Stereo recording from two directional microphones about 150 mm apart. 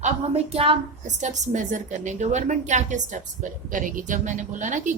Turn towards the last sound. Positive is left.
turn(degrees=-55)  # may be behind; listen again after turning